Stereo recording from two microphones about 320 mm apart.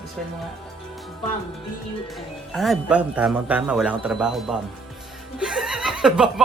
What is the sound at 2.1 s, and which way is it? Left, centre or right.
Speech, centre.